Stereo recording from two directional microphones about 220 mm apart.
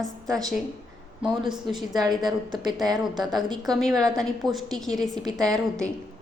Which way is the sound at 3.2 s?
Centre (ahead or behind).